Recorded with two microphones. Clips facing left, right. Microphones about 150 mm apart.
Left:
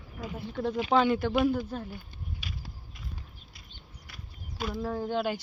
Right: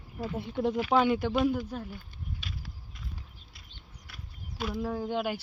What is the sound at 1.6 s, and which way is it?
Speech, 10° right (ahead or behind).